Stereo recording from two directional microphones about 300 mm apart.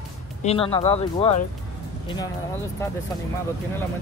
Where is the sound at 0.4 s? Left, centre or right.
Centre.